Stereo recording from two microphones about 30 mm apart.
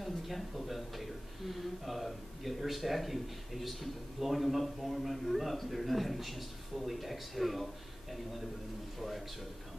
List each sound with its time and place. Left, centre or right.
0.0 s speech: centre